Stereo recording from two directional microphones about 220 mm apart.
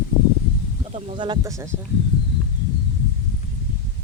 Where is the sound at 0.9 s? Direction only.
20° right (ahead or behind).